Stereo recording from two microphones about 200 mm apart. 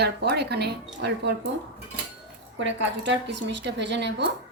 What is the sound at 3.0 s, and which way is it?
A woman's voice, 60° right (ahead or behind).